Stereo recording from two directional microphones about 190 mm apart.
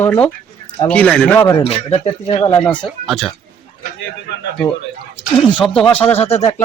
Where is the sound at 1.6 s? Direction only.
30° left (ahead or behind).